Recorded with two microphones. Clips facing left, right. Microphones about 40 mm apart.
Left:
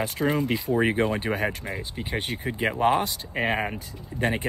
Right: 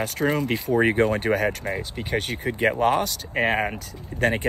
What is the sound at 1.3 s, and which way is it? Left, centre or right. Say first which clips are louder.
Speech: right 4 dB; centre.